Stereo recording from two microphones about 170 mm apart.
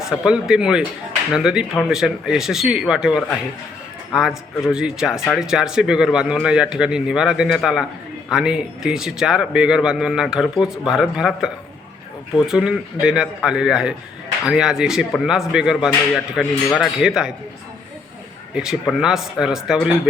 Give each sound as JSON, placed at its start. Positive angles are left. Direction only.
{"t": 0.0, "sound": "a man's voice", "side_deg": -5}
{"t": 18.5, "sound": "a man's voice", "side_deg": -5}